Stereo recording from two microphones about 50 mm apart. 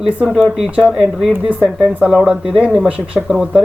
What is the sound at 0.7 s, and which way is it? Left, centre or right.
Speech, centre.